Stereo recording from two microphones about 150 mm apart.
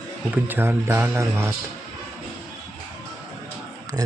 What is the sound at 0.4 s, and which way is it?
Speech, 15° right (ahead or behind).